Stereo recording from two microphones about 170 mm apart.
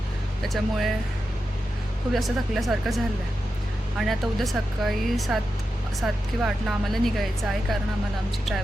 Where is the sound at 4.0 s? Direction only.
Centre (ahead or behind).